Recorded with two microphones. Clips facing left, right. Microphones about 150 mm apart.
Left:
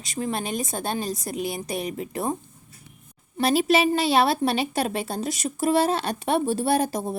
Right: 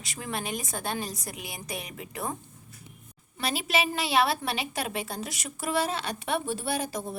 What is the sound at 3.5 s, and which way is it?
A woman's voice, 35° left (ahead or behind).